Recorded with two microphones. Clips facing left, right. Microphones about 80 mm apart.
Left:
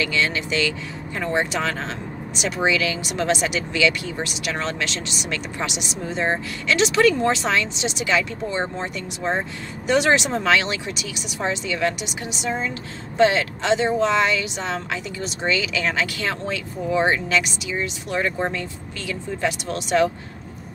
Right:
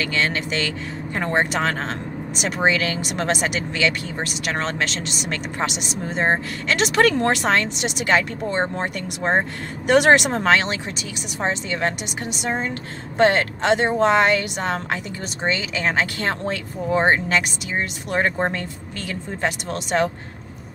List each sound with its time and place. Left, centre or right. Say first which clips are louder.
0.0 s speech: even; right